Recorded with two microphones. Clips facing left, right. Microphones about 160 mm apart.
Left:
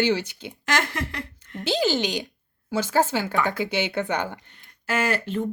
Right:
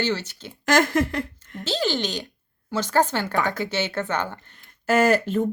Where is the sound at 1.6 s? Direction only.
15° left (ahead or behind).